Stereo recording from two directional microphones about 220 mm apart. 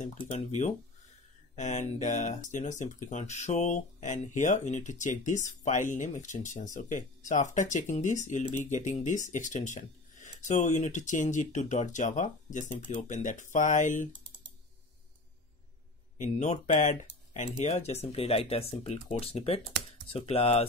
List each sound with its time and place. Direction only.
0.3 s speech: 30° left (ahead or behind)
16.2 s speech: 35° left (ahead or behind)